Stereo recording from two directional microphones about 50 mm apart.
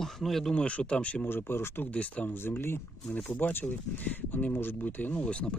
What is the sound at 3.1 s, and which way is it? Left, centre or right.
Speech, left.